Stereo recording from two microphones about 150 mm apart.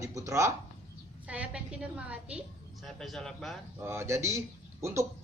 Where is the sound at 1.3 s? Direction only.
10° right (ahead or behind).